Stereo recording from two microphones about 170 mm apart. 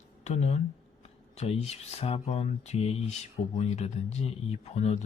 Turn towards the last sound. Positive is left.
turn(degrees=40)  # may be behind; listen again after turning